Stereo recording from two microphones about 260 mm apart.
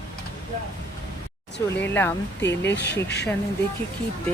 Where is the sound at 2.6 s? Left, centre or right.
Left.